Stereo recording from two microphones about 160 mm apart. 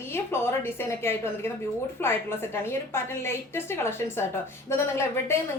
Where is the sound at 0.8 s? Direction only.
15° left (ahead or behind).